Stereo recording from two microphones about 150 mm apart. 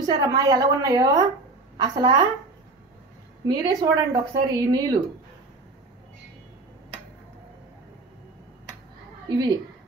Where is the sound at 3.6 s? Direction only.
25° right (ahead or behind).